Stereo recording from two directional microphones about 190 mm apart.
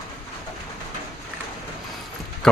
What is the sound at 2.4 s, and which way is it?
Speech, 5° left (ahead or behind).